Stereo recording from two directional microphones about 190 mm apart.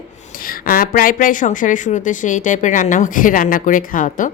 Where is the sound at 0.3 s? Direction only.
50° left (ahead or behind).